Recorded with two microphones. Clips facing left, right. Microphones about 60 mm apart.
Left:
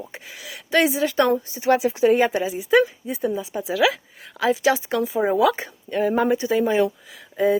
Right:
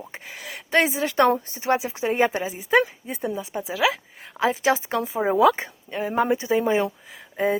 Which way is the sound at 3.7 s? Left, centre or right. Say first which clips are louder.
Left 3 dB; right.